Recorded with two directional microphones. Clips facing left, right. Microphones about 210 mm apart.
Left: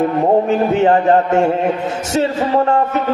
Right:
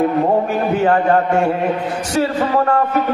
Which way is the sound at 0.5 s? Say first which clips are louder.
Left 3 dB; 25° left (ahead or behind).